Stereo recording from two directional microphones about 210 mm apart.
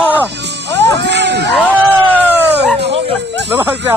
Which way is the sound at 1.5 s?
5° left (ahead or behind).